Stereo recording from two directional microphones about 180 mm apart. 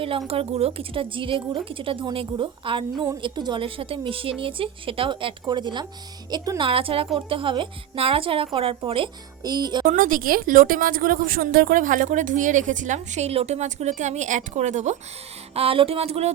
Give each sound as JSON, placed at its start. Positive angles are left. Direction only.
{"t": 0.3, "sound": "a woman's voice", "side_deg": -35}
{"t": 9.8, "sound": "a woman's voice", "side_deg": -50}